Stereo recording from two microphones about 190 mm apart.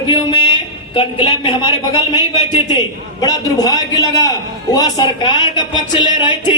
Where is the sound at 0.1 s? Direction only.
25° left (ahead or behind).